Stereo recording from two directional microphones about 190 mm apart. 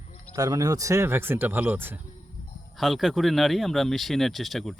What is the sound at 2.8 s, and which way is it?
Speech, centre (ahead or behind).